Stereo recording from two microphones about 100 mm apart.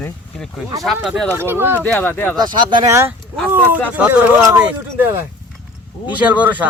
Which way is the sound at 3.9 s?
15° right (ahead or behind).